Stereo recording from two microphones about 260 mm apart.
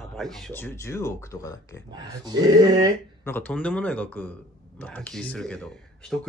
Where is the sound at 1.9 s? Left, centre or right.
Centre.